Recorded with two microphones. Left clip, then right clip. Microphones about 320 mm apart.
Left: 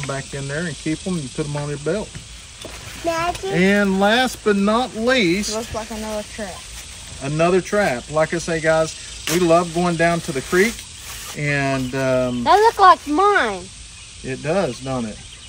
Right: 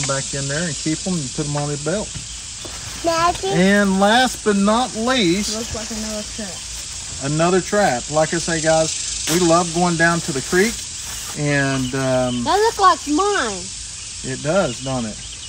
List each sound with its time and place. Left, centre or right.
0.0 s speech: centre
3.5 s speech: centre
7.2 s speech: centre
12.4 s speech: left
14.3 s speech: centre